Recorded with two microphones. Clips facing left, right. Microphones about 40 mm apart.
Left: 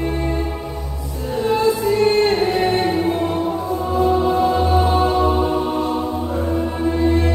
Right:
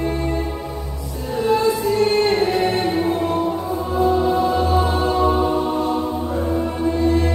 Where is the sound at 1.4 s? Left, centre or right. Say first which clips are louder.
Left 1 dB; centre.